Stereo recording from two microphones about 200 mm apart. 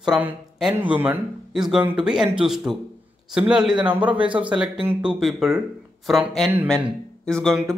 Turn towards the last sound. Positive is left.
turn(degrees=5)  # may be behind; listen again after turning